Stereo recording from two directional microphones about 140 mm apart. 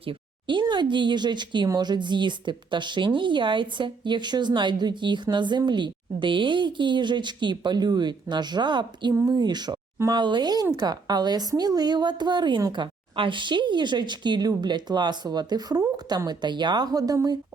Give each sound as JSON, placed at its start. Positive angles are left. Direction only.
{"t": 0.0, "sound": "speech", "side_deg": -35}